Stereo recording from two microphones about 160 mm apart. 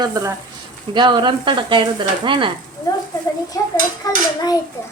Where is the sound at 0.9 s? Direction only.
30° right (ahead or behind).